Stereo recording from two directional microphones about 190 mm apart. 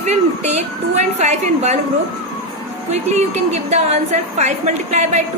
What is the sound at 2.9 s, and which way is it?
A woman's voice, 35° right (ahead or behind).